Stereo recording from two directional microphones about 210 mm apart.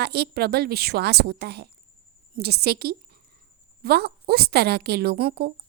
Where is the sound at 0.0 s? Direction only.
50° right (ahead or behind).